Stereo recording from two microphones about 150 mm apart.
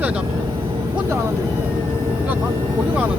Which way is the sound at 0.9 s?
15° right (ahead or behind).